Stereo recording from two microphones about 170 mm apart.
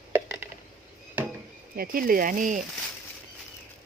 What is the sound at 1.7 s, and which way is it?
Speech, 60° right (ahead or behind).